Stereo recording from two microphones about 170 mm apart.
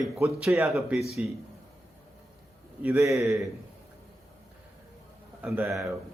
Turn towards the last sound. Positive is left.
turn(degrees=0)  # may be behind; listen again after turning